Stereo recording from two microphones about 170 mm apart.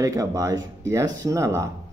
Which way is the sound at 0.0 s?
20° right (ahead or behind).